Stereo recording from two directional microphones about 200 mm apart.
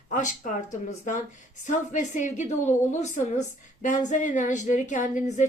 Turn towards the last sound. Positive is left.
turn(degrees=40)  # may be behind; listen again after turning